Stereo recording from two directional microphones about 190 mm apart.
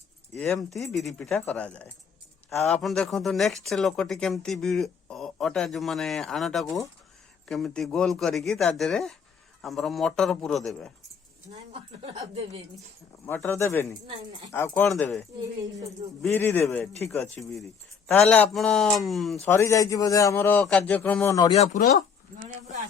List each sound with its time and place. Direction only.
0.3 s a man's voice: 5° left (ahead or behind)
11.7 s speech: 30° right (ahead or behind)
13.2 s a man's voice: 10° left (ahead or behind)
16.3 s a man's voice: 10° left (ahead or behind)
19.5 s a man's voice: 15° left (ahead or behind)
21.4 s speech: 35° left (ahead or behind)